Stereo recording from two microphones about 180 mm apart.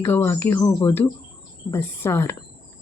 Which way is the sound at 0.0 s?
15° left (ahead or behind).